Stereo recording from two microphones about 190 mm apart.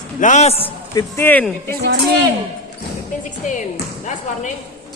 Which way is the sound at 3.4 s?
40° left (ahead or behind).